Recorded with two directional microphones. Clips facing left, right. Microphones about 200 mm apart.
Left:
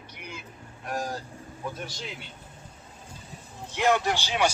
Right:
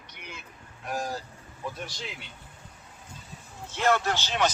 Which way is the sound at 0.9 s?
5° right (ahead or behind).